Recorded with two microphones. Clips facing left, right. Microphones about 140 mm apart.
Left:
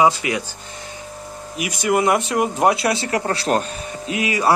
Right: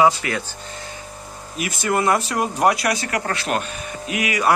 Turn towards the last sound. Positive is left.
turn(degrees=30)  # may be behind; listen again after turning